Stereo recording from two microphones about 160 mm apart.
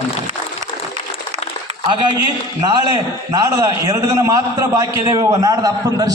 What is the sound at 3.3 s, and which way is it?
A man's voice, 20° right (ahead or behind).